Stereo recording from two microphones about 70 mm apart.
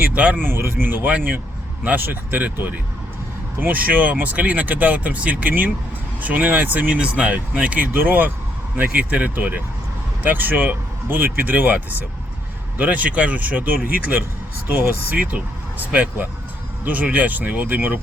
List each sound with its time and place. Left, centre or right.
0.1 s speech: centre
0.4 s speech: right